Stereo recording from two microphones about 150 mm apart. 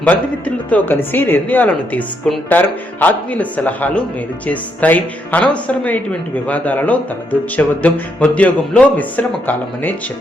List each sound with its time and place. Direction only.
0.0 s a woman's voice: 10° left (ahead or behind)